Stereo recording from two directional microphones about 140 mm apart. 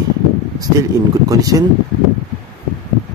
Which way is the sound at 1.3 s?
25° right (ahead or behind).